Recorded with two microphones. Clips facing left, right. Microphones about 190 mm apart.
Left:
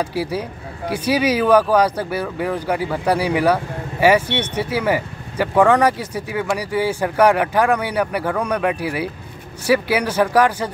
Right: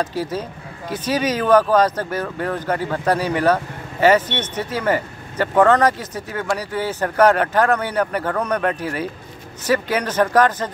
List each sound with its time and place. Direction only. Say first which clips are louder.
0.0 s speech: left 1 dB; 10° left (ahead or behind)